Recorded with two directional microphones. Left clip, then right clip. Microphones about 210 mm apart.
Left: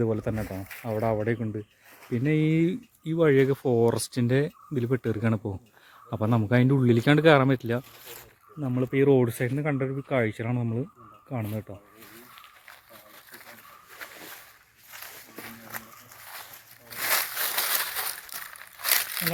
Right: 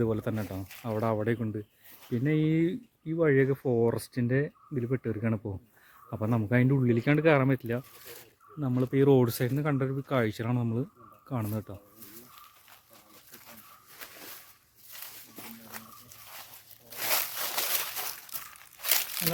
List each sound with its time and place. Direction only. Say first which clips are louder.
0.0 s speech: left 3 dB; 5° right (ahead or behind)
8.6 s speech: left 2 dB; 10° right (ahead or behind)
16.9 s a sound: left 4 dB; centre (ahead or behind)
18.8 s crumpling: left 4 dB; centre (ahead or behind)